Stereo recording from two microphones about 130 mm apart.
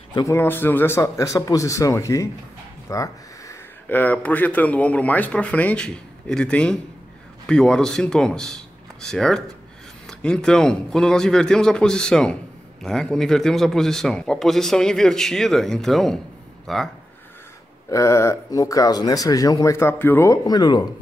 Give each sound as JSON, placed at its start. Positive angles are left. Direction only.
{"t": 0.1, "sound": "speech", "side_deg": 30}
{"t": 0.4, "sound": "speech", "side_deg": 15}
{"t": 2.9, "sound": "a sound", "side_deg": 25}
{"t": 3.9, "sound": "a man's voice", "side_deg": 15}
{"t": 17.8, "sound": "speech", "side_deg": 25}
{"t": 20.4, "sound": "speech", "side_deg": 30}